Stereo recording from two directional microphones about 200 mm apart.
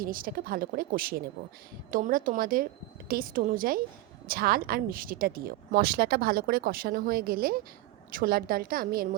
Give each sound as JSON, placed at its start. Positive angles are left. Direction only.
{"t": 0.0, "sound": "speech", "side_deg": -45}